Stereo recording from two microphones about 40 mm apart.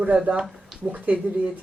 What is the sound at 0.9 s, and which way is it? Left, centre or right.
Speech, right.